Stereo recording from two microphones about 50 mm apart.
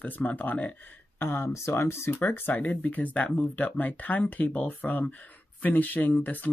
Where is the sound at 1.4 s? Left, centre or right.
Left.